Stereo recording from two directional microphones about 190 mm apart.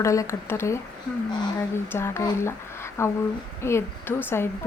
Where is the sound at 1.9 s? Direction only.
15° left (ahead or behind).